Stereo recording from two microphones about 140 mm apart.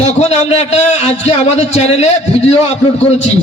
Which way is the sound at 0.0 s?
50° left (ahead or behind).